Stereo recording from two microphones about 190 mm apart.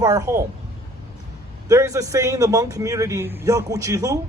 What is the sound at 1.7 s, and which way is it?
Speech, 15° right (ahead or behind).